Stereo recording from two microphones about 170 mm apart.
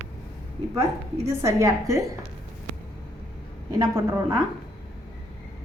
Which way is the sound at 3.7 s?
20° right (ahead or behind).